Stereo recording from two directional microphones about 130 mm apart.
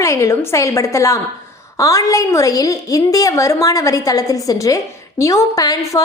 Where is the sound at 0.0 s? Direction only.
25° left (ahead or behind).